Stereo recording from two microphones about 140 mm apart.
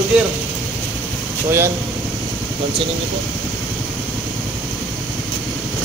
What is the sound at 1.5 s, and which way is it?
Speech, 20° right (ahead or behind).